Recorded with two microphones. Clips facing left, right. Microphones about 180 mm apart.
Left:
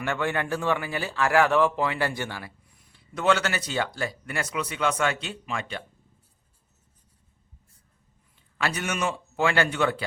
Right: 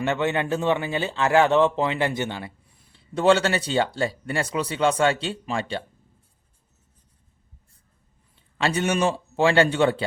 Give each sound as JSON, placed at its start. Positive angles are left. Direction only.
{"t": 0.0, "sound": "speech", "side_deg": -20}
{"t": 8.5, "sound": "speech", "side_deg": -25}